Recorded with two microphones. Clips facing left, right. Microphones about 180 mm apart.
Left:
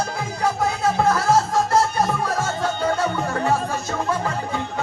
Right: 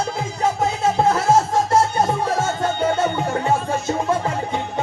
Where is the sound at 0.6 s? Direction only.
25° right (ahead or behind).